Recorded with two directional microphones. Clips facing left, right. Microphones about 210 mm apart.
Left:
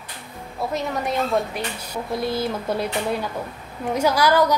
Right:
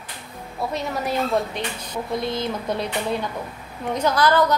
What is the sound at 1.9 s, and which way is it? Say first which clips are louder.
A woman's voice: left 1 dB; 5° left (ahead or behind).